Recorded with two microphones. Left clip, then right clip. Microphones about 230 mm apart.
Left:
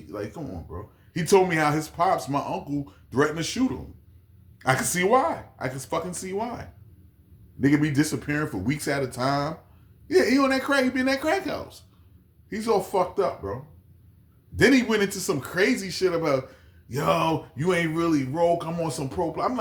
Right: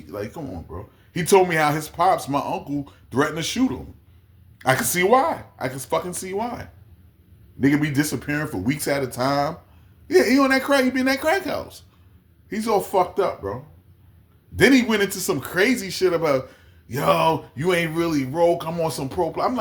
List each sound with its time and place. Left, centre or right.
0.0 s a man's voice: right